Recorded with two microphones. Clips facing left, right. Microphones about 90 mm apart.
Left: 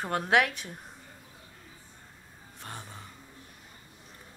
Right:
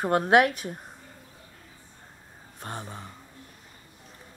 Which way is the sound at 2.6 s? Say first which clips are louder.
Right 6 dB; 40° right (ahead or behind).